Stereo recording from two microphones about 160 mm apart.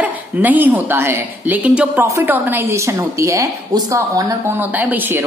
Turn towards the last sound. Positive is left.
turn(degrees=-10)  # may be behind; listen again after turning